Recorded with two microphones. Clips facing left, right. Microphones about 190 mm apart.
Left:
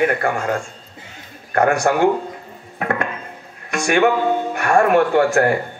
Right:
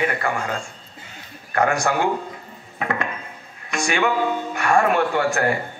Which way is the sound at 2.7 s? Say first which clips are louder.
Left 3 dB; 50° left (ahead or behind).